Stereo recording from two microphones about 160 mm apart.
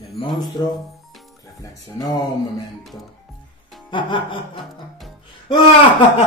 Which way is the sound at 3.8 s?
30° left (ahead or behind).